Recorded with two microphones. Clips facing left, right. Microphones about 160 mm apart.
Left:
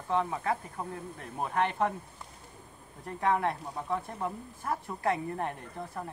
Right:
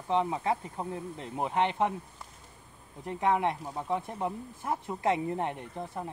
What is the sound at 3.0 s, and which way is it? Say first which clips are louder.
Speech: right 1 dB; 15° right (ahead or behind).